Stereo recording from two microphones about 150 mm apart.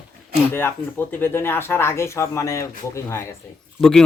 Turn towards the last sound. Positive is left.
turn(degrees=5)  # may be behind; listen again after turning